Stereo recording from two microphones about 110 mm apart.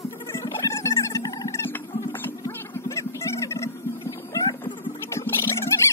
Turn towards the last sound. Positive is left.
turn(degrees=20)  # may be behind; listen again after turning